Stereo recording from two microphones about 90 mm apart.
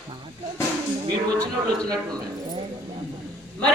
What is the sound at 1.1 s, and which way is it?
Speech, 45° right (ahead or behind).